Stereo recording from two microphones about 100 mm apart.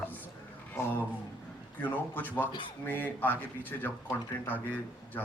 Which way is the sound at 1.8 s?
20° left (ahead or behind).